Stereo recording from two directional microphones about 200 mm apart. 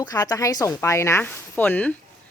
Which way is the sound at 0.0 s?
20° left (ahead or behind).